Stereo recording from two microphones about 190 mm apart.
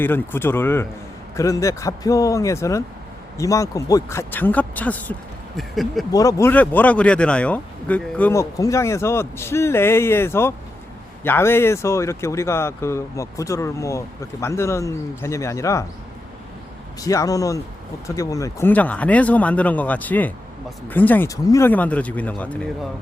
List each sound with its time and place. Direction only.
0.0 s speech: 10° left (ahead or behind)
6.1 s speech: 20° left (ahead or behind)
17.0 s speech: 15° left (ahead or behind)